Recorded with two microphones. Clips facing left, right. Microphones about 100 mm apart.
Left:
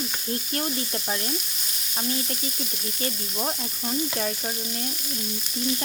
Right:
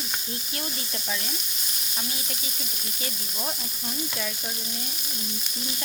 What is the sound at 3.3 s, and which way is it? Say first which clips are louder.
Frying: left 5 dB; 35° left (ahead or behind).